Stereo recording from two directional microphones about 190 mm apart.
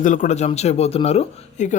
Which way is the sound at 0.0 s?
40° left (ahead or behind).